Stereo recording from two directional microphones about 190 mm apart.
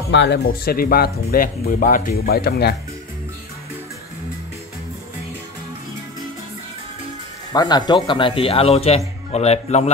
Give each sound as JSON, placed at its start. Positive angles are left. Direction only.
{"t": 0.1, "sound": "speech", "side_deg": 65}
{"t": 7.5, "sound": "speech", "side_deg": 20}